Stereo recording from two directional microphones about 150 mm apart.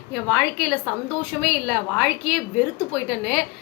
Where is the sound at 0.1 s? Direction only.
5° right (ahead or behind).